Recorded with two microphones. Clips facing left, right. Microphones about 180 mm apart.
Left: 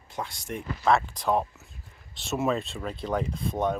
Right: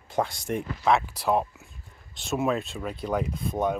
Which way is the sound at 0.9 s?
5° right (ahead or behind).